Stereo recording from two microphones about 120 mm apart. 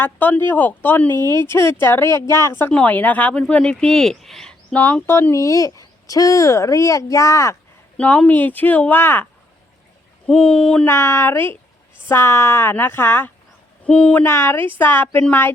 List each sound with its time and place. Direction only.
0.0 s speech: 15° left (ahead or behind)
1.1 s speech: 35° right (ahead or behind)
1.4 s speech: 20° left (ahead or behind)
7.9 s speech: 10° left (ahead or behind)
10.2 s speech: 10° left (ahead or behind)
10.8 s speech: 20° left (ahead or behind)